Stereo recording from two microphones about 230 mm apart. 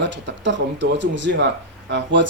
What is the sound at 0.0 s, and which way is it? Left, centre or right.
Speech, right.